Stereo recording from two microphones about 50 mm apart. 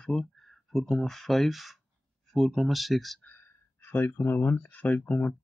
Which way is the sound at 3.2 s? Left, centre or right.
Left.